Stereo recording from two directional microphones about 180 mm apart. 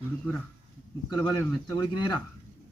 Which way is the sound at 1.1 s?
20° left (ahead or behind).